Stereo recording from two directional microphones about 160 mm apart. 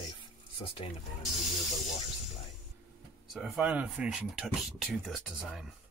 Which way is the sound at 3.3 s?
Centre (ahead or behind).